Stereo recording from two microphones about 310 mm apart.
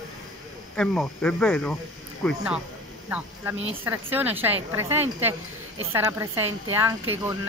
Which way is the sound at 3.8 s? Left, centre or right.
Centre.